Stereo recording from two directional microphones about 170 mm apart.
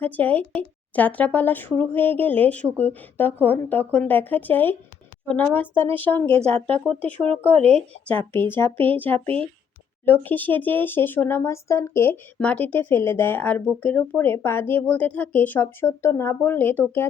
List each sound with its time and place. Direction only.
0.0 s speech: 10° left (ahead or behind)
7.3 s speech: 35° right (ahead or behind)
8.3 s speech: 10° left (ahead or behind)